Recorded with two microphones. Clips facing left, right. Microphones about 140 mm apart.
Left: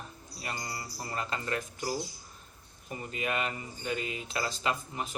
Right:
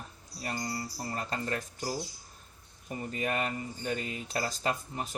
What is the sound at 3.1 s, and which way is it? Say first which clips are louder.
Speech: right 1 dB; 40° right (ahead or behind).